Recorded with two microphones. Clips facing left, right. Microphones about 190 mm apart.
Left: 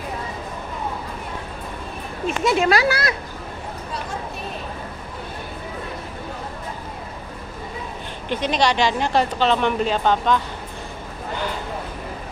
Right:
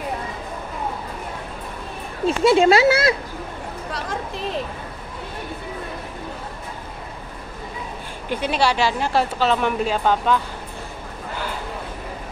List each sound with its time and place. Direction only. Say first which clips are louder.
2.2 s speech: right 4 dB; 30° right (ahead or behind)
8.3 s speech: even; 10° right (ahead or behind)